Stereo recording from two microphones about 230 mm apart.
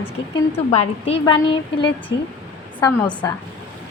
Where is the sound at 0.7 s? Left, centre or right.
Left.